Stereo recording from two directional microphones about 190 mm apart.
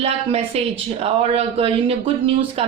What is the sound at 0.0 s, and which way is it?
Speech, 30° right (ahead or behind).